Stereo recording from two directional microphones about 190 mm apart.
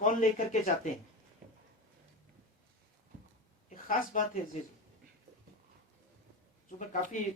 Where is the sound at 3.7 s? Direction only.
45° left (ahead or behind).